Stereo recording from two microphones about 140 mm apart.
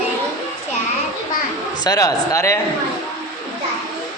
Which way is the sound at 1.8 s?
25° left (ahead or behind).